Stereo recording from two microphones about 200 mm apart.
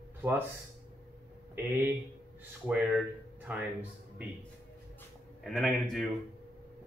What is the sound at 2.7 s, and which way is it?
Speech, 5° right (ahead or behind).